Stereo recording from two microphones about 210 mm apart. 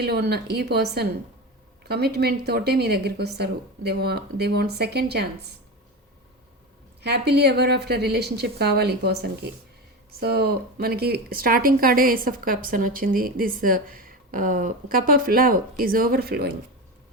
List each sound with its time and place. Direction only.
0.0 s speech: 50° right (ahead or behind)
7.0 s speech: 50° right (ahead or behind)